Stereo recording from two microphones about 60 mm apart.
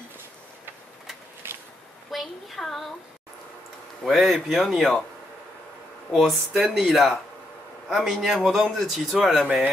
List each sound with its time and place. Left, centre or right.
1.4 s a sound: right
2.0 s a woman's voice: centre
4.0 s speech: centre
6.1 s speech: centre